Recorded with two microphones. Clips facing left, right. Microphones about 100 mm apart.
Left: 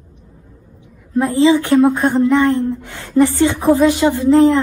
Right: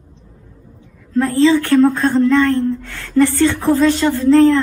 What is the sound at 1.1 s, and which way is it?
A woman's voice, 15° left (ahead or behind).